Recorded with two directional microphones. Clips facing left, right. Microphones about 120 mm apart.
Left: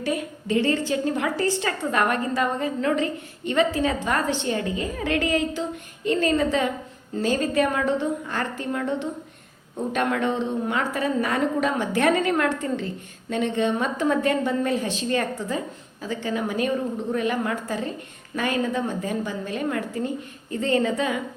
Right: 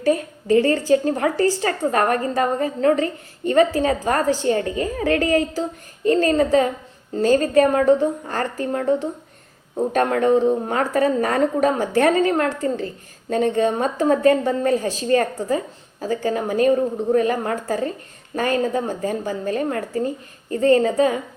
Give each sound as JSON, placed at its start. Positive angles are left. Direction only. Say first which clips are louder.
{"t": 0.0, "sound": "a woman's voice", "louder": "right 7 dB", "side_deg": -40}